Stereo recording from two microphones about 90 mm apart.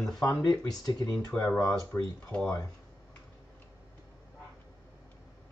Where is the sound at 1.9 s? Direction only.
15° left (ahead or behind).